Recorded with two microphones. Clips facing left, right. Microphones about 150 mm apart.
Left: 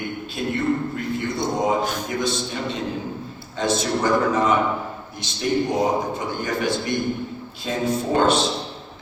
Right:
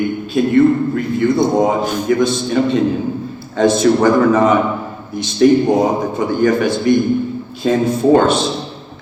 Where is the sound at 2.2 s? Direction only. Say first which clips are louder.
Right 10 dB; 55° right (ahead or behind).